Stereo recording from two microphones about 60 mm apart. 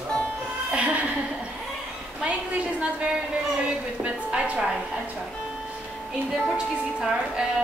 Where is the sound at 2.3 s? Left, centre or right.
Right.